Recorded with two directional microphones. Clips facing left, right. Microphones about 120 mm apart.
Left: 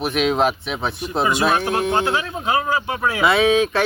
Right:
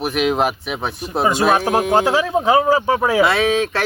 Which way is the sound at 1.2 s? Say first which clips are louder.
Right 3 dB; 40° right (ahead or behind).